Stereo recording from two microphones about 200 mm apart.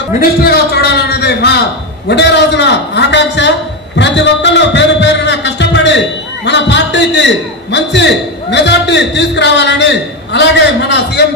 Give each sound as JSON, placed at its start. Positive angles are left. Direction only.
{"t": 0.2, "sound": "a man's voice", "side_deg": 50}